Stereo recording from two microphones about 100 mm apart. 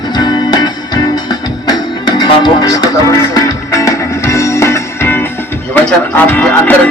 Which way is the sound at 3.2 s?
35° left (ahead or behind).